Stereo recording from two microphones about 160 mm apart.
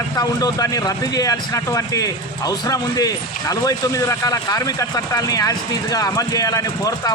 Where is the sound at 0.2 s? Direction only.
25° left (ahead or behind).